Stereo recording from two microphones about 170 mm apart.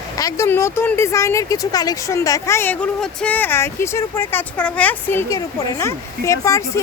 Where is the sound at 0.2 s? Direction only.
20° left (ahead or behind).